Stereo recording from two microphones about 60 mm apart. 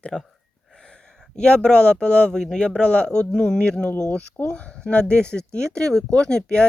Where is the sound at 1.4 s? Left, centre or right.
Centre.